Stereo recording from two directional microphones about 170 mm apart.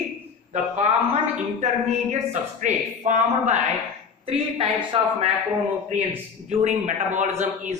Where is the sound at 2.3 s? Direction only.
45° right (ahead or behind).